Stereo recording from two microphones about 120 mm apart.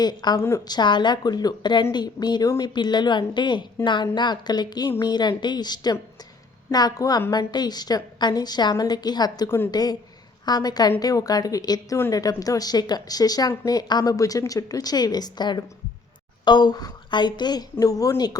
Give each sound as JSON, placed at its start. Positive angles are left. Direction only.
{"t": 0.0, "sound": "a woman's voice", "side_deg": 35}
{"t": 0.3, "sound": "a woman's voice", "side_deg": 25}
{"t": 0.7, "sound": "a woman's voice", "side_deg": 40}